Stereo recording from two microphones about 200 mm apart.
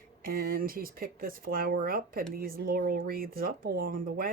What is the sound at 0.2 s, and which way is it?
Speech, 45° right (ahead or behind).